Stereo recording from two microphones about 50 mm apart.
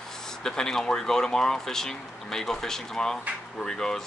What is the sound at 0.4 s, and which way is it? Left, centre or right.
Speech, centre.